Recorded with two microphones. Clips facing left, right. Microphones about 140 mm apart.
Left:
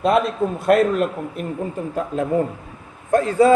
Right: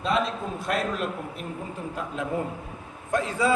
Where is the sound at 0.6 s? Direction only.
55° left (ahead or behind).